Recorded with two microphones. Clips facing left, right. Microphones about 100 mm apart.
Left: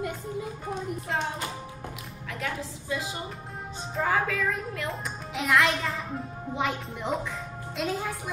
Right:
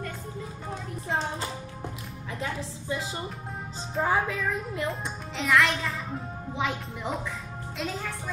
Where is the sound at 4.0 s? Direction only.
20° right (ahead or behind).